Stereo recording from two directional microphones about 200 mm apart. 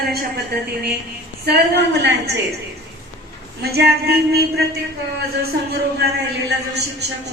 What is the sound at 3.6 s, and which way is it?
A woman's voice, 55° right (ahead or behind).